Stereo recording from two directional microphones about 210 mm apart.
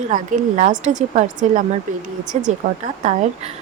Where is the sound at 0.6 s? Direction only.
35° right (ahead or behind).